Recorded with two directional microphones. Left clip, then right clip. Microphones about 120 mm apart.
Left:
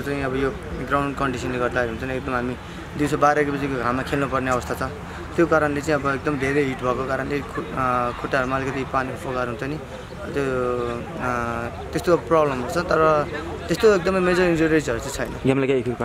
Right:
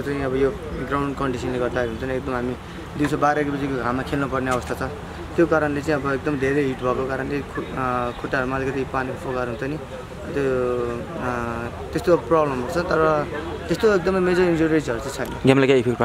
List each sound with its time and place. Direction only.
0.1 s speech: 5° left (ahead or behind)
15.4 s a man's voice: 30° right (ahead or behind)